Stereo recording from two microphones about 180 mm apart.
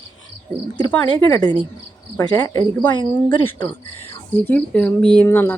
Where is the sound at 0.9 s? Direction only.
20° left (ahead or behind).